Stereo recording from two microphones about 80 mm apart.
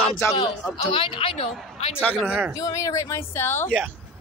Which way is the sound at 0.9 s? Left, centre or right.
Left.